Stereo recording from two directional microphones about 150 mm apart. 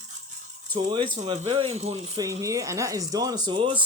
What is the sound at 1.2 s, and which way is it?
Speech, 45° right (ahead or behind).